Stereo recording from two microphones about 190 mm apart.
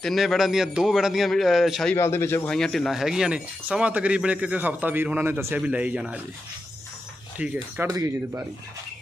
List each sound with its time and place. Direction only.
0.0 s a man's voice: centre (ahead or behind)
2.0 s speech: 15° left (ahead or behind); by 6.1 s 5° right (ahead or behind)
7.3 s speech: 5° right (ahead or behind)